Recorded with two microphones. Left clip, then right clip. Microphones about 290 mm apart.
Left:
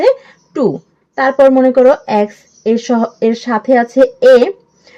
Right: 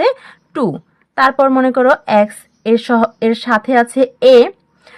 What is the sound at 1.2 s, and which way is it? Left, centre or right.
Speech, right.